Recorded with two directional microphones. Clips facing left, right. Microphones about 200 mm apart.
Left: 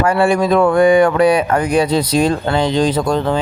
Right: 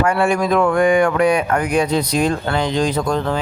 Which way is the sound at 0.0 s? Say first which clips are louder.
Left 3 dB; 35° left (ahead or behind).